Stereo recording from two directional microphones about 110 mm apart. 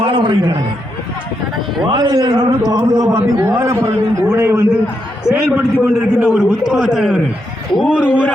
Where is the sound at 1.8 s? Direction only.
40° right (ahead or behind); by 4.6 s 20° right (ahead or behind).